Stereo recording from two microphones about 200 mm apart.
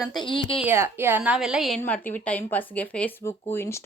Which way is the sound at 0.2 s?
25° left (ahead or behind).